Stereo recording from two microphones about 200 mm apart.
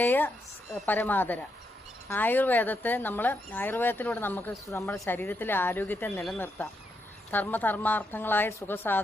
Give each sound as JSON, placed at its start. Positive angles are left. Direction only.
{"t": 0.0, "sound": "speech", "side_deg": 10}